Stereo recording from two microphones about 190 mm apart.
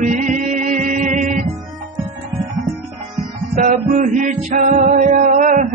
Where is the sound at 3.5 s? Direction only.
40° right (ahead or behind).